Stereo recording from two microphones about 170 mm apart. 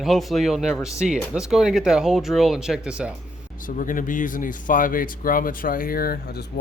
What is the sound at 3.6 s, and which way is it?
Speech, 50° left (ahead or behind).